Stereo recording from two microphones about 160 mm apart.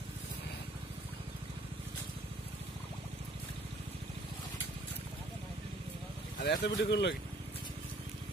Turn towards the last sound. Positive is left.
turn(degrees=90)